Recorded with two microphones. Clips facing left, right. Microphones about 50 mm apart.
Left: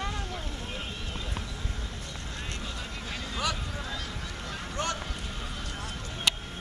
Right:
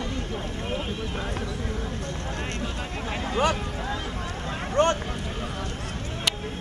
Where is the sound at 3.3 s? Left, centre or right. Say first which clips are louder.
Right 8 dB; right.